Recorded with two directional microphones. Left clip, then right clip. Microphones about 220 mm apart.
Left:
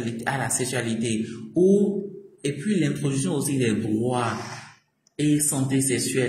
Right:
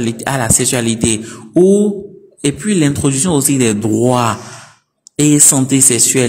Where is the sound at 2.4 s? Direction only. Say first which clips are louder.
Right 11 dB; 50° right (ahead or behind).